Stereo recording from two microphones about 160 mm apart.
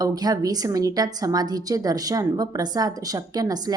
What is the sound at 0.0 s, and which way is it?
A woman's voice, 20° right (ahead or behind).